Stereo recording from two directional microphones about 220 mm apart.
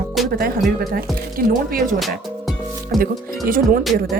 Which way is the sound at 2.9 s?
Centre (ahead or behind).